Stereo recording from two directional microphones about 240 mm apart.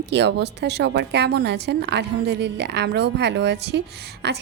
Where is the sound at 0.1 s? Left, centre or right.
Right.